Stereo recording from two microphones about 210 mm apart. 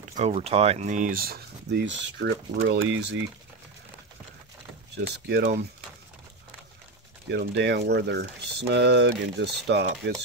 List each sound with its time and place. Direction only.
0.2 s speech: 30° right (ahead or behind); by 3.2 s 55° right (ahead or behind)
5.0 s speech: 50° right (ahead or behind)
7.2 s speech: 55° right (ahead or behind)